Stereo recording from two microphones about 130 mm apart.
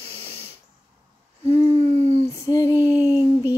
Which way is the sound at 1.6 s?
50° right (ahead or behind).